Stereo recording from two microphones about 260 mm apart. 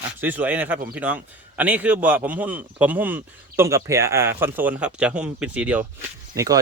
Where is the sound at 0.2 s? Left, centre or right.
Centre.